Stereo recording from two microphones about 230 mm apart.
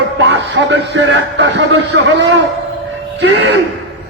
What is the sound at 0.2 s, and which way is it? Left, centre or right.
A man's voice, right.